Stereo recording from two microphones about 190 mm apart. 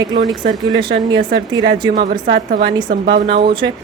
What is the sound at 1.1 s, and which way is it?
Speech, 65° right (ahead or behind).